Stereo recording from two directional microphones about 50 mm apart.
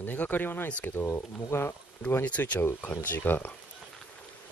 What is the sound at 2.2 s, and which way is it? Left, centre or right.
Speech, left.